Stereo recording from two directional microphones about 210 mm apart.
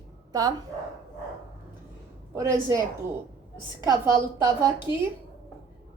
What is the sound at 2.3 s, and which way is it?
Speech, 10° right (ahead or behind).